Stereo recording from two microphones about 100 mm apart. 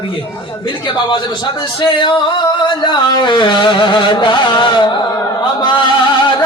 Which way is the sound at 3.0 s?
45° left (ahead or behind).